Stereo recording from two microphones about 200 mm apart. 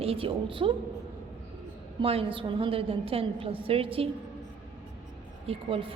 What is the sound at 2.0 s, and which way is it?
A woman's voice, 30° right (ahead or behind).